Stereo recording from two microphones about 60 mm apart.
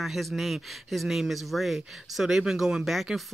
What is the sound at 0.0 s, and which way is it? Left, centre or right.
Speech, centre.